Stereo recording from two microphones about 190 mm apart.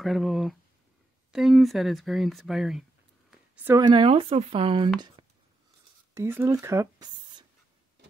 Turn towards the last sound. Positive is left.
turn(degrees=-20)  # may be behind; listen again after turning